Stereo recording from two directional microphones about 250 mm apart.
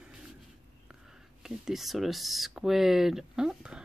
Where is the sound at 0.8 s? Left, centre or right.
Centre.